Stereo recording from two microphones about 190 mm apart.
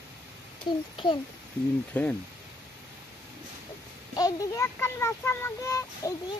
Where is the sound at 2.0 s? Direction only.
10° left (ahead or behind).